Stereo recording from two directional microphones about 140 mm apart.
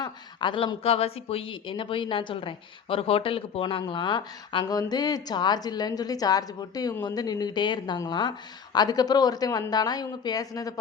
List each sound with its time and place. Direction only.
0.0 s a woman's voice: 35° left (ahead or behind)